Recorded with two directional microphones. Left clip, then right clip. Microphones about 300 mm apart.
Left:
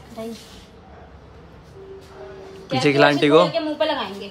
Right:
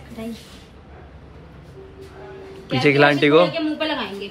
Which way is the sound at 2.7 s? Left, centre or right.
Centre.